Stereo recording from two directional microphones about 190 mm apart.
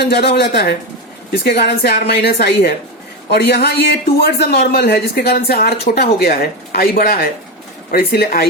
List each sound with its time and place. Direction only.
0.0 s speech: 60° left (ahead or behind)